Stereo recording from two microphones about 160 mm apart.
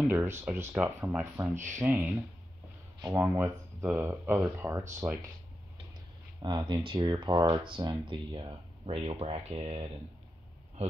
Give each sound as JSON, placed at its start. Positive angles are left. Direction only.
{"t": 0.0, "sound": "speech", "side_deg": -15}
{"t": 6.4, "sound": "speech", "side_deg": -30}